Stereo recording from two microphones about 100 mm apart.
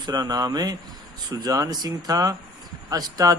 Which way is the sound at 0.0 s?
40° right (ahead or behind).